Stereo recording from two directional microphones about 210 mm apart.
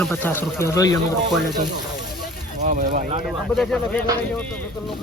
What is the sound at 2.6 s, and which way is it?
Speech, 35° right (ahead or behind).